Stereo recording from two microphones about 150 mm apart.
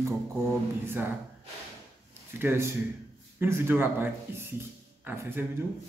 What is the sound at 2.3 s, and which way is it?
Speech, 15° right (ahead or behind).